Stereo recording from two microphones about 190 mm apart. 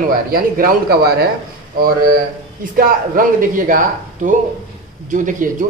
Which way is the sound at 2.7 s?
45° right (ahead or behind).